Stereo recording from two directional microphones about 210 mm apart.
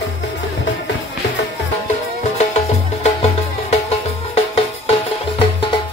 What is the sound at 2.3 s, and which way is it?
Music, 30° left (ahead or behind).